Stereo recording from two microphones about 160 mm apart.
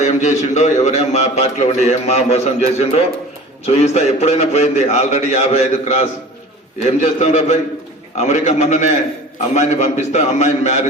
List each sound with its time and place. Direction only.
0.0 s a man's voice: 45° left (ahead or behind)